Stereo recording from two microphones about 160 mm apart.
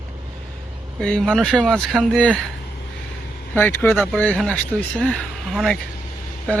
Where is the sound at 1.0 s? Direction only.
5° left (ahead or behind).